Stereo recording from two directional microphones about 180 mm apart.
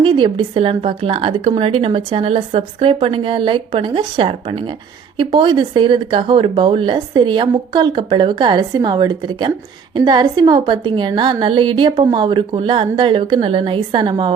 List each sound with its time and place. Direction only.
0.0 s a woman's voice: 25° right (ahead or behind)